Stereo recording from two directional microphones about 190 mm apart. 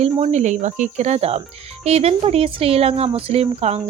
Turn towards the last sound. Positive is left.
turn(degrees=-35)  # may be behind; listen again after turning